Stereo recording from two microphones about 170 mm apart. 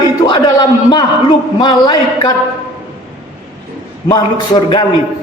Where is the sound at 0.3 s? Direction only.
25° left (ahead or behind).